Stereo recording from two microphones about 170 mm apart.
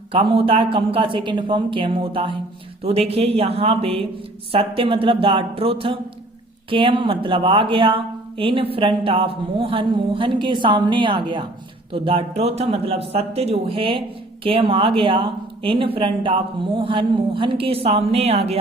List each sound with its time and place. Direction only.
0.1 s speech: 30° right (ahead or behind)